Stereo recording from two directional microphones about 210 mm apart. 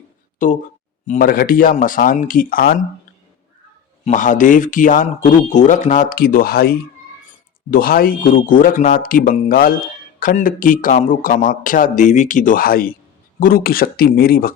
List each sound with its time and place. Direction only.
0.3 s speech: 40° left (ahead or behind)
4.0 s speech: 40° left (ahead or behind)